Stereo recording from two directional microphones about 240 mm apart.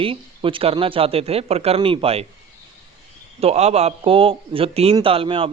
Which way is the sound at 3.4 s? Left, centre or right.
Right.